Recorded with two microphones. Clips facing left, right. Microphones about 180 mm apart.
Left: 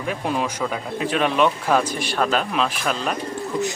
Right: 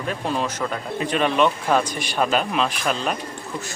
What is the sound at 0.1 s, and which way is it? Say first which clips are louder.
Speech: left 1 dB; 10° left (ahead or behind).